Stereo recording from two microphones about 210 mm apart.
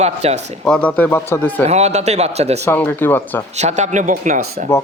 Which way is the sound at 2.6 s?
10° left (ahead or behind).